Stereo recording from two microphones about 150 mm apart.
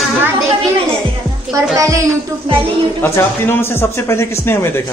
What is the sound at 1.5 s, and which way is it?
Speech, 20° right (ahead or behind).